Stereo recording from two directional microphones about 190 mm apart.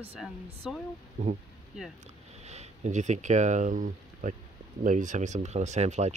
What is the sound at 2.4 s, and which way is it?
Speech, 35° right (ahead or behind).